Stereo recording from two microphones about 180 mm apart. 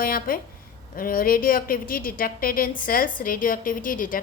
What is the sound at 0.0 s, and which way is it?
A woman's voice, 55° left (ahead or behind).